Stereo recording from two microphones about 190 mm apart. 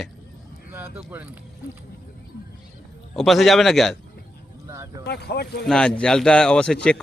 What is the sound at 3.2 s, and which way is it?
Speech, centre (ahead or behind).